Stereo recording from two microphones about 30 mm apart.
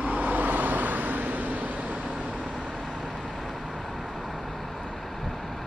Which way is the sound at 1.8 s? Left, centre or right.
Right.